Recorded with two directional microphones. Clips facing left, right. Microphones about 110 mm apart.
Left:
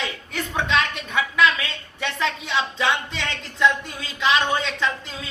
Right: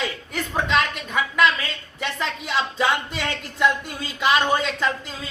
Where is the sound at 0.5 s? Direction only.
Centre (ahead or behind).